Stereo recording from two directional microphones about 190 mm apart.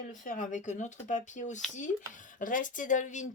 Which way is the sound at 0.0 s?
45° left (ahead or behind).